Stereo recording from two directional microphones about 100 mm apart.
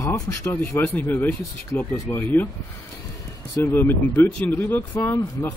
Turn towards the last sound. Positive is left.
turn(degrees=20)  # may be behind; listen again after turning